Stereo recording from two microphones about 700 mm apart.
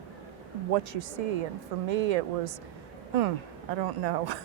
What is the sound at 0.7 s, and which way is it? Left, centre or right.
Speech, right.